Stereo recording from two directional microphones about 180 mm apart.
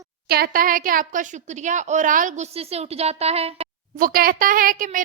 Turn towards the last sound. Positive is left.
turn(degrees=-50)  # may be behind; listen again after turning